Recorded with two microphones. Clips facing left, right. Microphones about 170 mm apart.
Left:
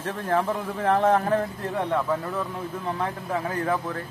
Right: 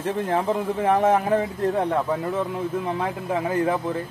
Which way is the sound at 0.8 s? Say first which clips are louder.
Right 1 dB; 15° right (ahead or behind).